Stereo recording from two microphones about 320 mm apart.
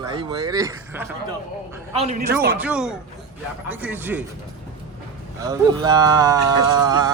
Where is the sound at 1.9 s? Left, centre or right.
Right.